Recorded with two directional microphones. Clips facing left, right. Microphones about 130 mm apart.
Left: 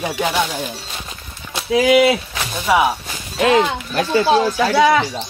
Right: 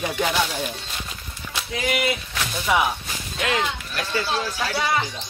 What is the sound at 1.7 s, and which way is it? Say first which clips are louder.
Speech: left 12 dB; 75° left (ahead or behind).